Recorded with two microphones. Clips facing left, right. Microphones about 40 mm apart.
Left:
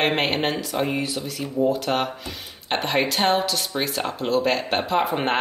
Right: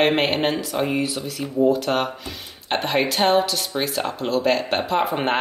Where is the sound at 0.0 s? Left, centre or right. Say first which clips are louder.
Right 3 dB; centre.